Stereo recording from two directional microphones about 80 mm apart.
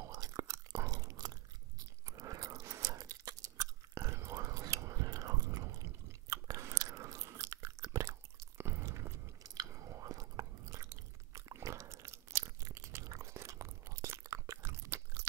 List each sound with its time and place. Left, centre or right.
0.0 s chewing: right
2.0 s crunch: right
6.3 s chewing: right
14.4 s crunch: right